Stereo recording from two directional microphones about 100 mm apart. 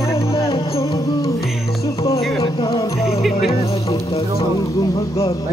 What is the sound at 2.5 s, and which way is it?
Music, 60° left (ahead or behind).